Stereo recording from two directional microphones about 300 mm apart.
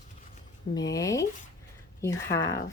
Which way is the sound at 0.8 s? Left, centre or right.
Centre.